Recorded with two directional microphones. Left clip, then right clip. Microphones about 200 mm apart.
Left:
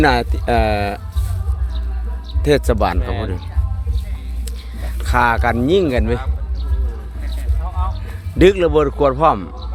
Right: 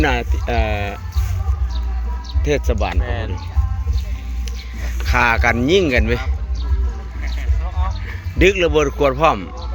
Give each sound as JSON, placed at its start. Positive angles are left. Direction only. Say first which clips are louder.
{"t": 0.0, "sound": "speech", "louder": "left 4 dB", "side_deg": 35}
{"t": 2.4, "sound": "speech", "louder": "left 5 dB", "side_deg": 40}
{"t": 5.0, "sound": "speech", "louder": "even", "side_deg": 15}
{"t": 8.5, "sound": "a man's voice", "louder": "left 1 dB", "side_deg": 20}